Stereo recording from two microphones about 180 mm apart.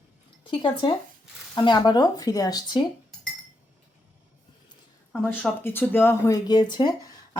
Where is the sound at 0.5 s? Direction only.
25° left (ahead or behind).